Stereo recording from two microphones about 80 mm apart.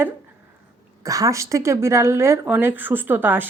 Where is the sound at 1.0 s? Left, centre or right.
Right.